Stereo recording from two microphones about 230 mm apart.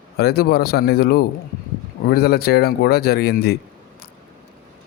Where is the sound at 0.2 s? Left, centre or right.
Left.